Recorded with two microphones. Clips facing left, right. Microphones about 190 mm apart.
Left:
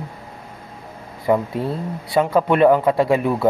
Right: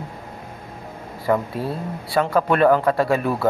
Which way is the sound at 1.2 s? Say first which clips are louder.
Left 2 dB; 20° left (ahead or behind).